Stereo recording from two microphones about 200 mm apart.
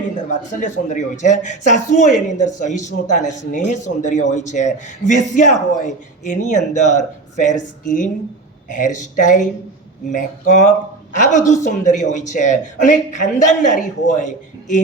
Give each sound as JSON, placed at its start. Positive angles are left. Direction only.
{"t": 0.3, "sound": "a man's voice", "side_deg": 40}